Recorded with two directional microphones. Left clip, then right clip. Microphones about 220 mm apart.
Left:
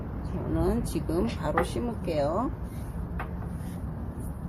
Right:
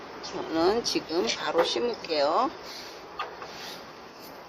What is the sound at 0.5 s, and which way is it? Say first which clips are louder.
Speech: right 5 dB; 25° right (ahead or behind).